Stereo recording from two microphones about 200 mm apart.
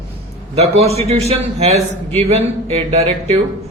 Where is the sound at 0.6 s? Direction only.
30° right (ahead or behind).